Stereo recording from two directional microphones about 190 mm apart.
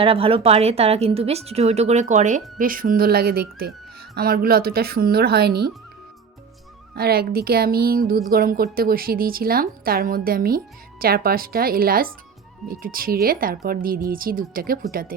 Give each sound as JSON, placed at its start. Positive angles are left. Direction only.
{"t": 0.0, "sound": "a woman's voice", "side_deg": -30}
{"t": 6.9, "sound": "a woman's voice", "side_deg": -55}